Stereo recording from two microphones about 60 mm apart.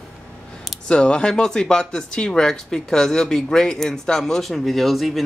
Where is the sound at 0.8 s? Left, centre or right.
Centre.